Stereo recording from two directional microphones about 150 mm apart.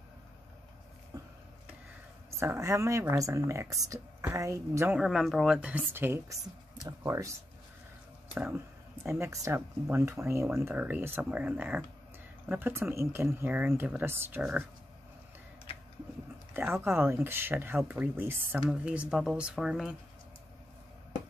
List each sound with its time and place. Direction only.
1.1 s a sound: 25° right (ahead or behind)
2.4 s speech: 15° right (ahead or behind)
4.9 s speech: centre (ahead or behind); by 7.3 s 20° right (ahead or behind)
9.2 s speech: 20° right (ahead or behind)
16.5 s speech: 15° right (ahead or behind)